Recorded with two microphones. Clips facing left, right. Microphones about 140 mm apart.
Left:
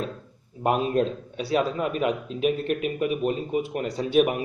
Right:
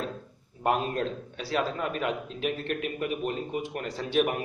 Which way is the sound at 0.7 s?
20° left (ahead or behind).